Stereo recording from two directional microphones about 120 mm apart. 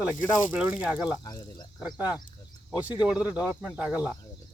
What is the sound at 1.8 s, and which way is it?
Speech, 10° right (ahead or behind).